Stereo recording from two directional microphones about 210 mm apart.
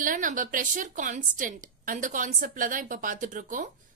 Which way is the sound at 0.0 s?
40° right (ahead or behind).